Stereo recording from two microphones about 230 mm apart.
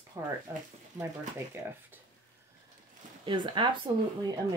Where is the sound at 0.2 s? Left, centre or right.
Centre.